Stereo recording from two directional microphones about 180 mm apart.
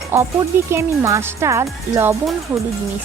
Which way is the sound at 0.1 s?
10° right (ahead or behind).